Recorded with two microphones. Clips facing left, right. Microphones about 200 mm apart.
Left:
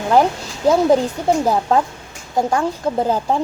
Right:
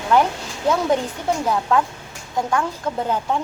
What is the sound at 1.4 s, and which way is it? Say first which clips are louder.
Speech: left 3 dB; 35° left (ahead or behind).